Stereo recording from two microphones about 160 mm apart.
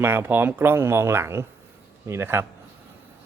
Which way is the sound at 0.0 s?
10° right (ahead or behind).